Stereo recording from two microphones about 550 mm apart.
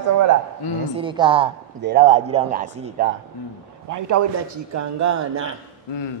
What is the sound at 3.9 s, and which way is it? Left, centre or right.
A man's voice, right.